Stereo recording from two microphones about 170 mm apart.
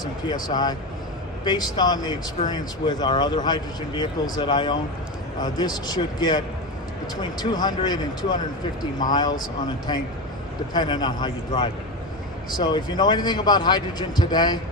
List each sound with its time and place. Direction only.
0.4 s speech: 25° left (ahead or behind)
9.9 s speech: 25° left (ahead or behind)